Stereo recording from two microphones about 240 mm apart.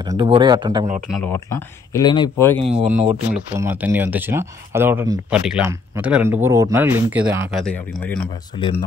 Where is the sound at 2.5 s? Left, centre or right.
Right.